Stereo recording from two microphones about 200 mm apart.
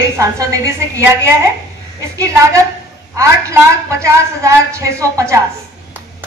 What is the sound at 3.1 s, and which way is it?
A woman's voice, 15° right (ahead or behind).